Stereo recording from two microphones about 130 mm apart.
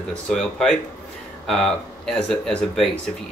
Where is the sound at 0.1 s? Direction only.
5° left (ahead or behind).